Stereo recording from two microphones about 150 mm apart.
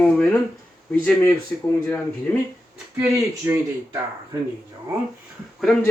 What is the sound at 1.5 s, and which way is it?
Speech, 10° left (ahead or behind).